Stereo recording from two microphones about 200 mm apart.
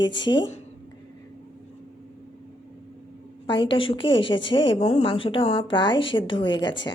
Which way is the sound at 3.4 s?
25° left (ahead or behind).